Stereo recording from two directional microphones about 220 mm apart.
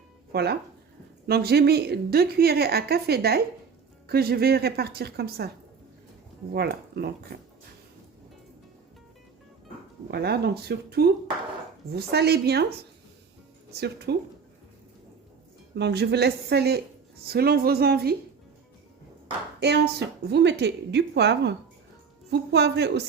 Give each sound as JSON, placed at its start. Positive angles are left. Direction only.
{"t": 0.3, "sound": "a woman's voice", "side_deg": -45}
{"t": 6.5, "sound": "a woman's voice", "side_deg": -45}
{"t": 10.1, "sound": "a woman's voice", "side_deg": -45}
{"t": 13.7, "sound": "a woman's voice", "side_deg": -45}
{"t": 15.8, "sound": "a woman's voice", "side_deg": -50}
{"t": 19.5, "sound": "a woman's voice", "side_deg": -50}